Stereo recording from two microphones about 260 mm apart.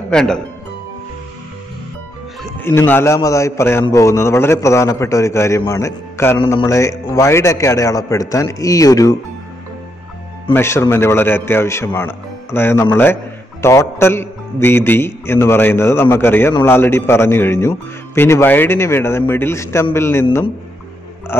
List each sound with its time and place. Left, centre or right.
0.1 s speech: centre
2.6 s a man's voice: centre
10.5 s a man's voice: centre
21.3 s a sound: centre